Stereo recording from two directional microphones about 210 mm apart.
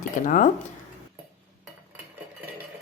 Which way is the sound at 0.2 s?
40° left (ahead or behind).